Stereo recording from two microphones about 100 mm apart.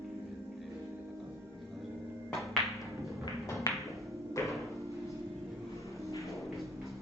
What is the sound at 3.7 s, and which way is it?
Music, 20° left (ahead or behind).